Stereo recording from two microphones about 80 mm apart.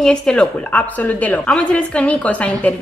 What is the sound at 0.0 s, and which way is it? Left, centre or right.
A woman's voice, centre.